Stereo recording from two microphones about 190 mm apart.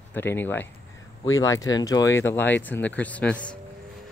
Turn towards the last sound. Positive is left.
turn(degrees=5)  # may be behind; listen again after turning